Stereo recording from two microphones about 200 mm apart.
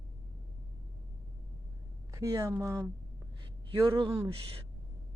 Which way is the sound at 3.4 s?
20° right (ahead or behind).